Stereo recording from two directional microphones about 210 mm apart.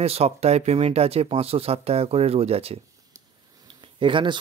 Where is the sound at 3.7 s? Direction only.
25° right (ahead or behind).